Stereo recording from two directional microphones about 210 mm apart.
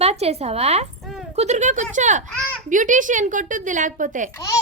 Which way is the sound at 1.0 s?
Centre (ahead or behind).